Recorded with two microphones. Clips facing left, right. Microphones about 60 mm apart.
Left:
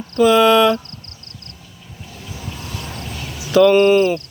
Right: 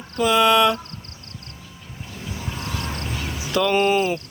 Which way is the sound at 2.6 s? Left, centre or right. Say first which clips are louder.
Right 4 dB; right.